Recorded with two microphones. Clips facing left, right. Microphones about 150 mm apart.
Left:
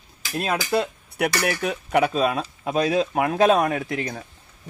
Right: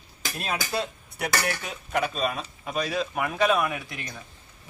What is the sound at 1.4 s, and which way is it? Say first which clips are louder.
Speech: left 7 dB; 65° left (ahead or behind).